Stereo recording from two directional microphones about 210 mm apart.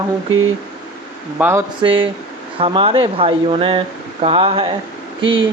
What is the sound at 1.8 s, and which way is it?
Speech, 25° right (ahead or behind).